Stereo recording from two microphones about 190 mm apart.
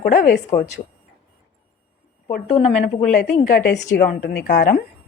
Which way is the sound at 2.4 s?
35° left (ahead or behind).